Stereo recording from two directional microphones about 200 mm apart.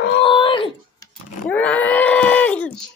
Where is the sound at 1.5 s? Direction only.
10° left (ahead or behind).